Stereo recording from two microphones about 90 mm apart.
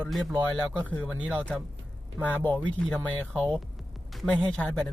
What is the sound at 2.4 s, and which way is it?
Speech, 15° left (ahead or behind).